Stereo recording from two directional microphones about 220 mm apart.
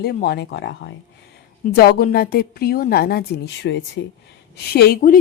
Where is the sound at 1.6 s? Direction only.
45° left (ahead or behind).